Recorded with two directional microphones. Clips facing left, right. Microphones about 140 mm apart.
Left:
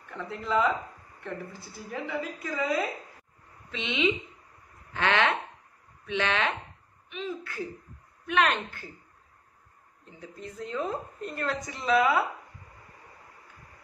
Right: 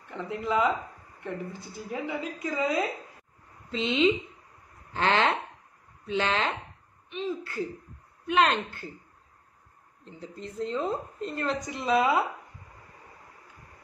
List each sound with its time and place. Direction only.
0.1 s a woman's voice: 15° right (ahead or behind)
3.7 s speech: 35° right (ahead or behind)
10.1 s a woman's voice: 30° right (ahead or behind)